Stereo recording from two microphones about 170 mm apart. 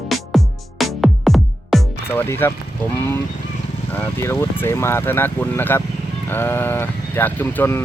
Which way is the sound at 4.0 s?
15° left (ahead or behind).